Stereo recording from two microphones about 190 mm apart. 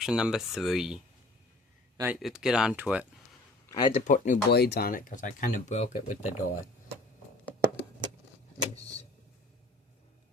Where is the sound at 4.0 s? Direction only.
40° left (ahead or behind).